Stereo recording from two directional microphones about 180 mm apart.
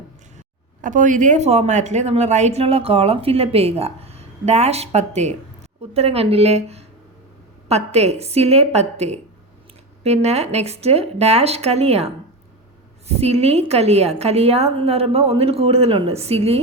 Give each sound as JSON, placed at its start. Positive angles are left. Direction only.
{"t": 0.3, "sound": "speech", "side_deg": -45}